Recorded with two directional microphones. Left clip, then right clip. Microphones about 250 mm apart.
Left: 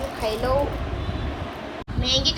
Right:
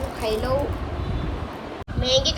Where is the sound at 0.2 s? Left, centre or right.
Centre.